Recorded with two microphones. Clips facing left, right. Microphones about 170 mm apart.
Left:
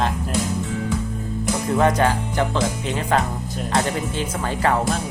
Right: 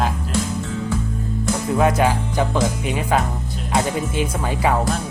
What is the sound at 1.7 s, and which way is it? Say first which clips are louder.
Speech: right 1 dB; 5° right (ahead or behind).